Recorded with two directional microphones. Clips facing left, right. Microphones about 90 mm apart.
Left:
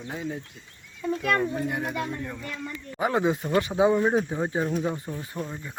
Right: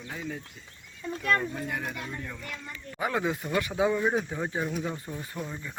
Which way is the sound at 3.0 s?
25° left (ahead or behind).